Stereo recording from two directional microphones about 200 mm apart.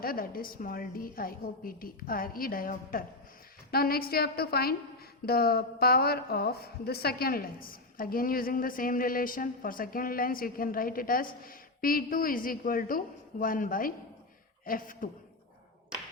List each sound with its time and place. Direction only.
0.0 s a woman's voice: 45° left (ahead or behind)